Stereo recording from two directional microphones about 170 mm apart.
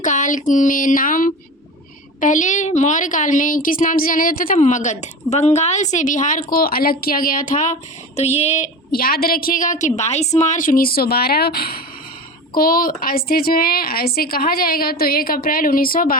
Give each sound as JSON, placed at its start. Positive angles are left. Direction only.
{"t": 0.0, "sound": "a woman's voice", "side_deg": 50}
{"t": 8.9, "sound": "a woman's voice", "side_deg": 60}